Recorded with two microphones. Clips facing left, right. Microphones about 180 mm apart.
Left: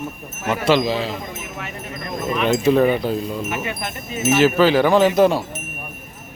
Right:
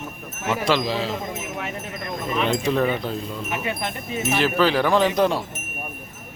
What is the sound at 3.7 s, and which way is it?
Speech, 25° right (ahead or behind).